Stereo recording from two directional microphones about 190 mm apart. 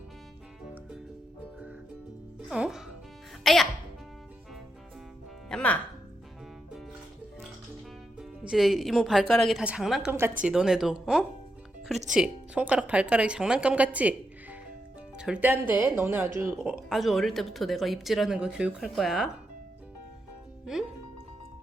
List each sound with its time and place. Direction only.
2.5 s speech: 5° right (ahead or behind)
5.5 s music: 5° left (ahead or behind)
8.2 s speech: centre (ahead or behind)
16.6 s speech: 5° right (ahead or behind)